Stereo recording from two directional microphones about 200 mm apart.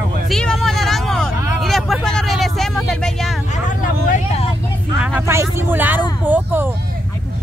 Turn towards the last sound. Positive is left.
turn(degrees=-10)  # may be behind; listen again after turning